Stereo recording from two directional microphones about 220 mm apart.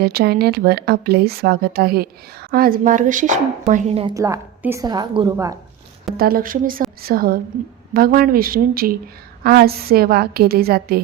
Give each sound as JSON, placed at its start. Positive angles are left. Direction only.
{"t": 0.0, "sound": "speech", "side_deg": -45}
{"t": 4.1, "sound": "a woman's voice", "side_deg": -15}
{"t": 6.1, "sound": "a woman's voice", "side_deg": -40}